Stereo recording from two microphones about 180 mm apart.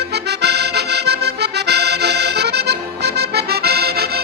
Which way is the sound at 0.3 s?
65° right (ahead or behind).